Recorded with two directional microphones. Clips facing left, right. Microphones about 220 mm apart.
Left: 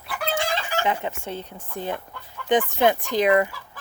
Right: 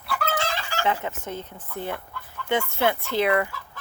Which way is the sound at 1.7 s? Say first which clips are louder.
Left 2 dB; 15° left (ahead or behind).